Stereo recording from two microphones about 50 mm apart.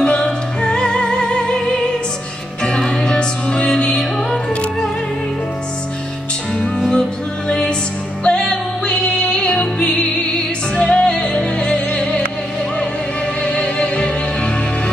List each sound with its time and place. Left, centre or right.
0.0 s music: left
2.6 s music: centre
6.9 s music: centre
13.4 s music: left